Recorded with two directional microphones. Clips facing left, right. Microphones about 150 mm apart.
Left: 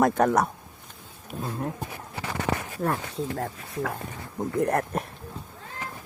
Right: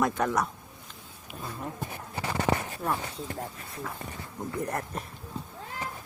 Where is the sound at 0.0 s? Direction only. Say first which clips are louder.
Left 6 dB; 50° left (ahead or behind).